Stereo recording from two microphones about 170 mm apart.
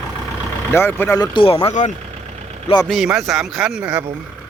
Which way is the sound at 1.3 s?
30° left (ahead or behind).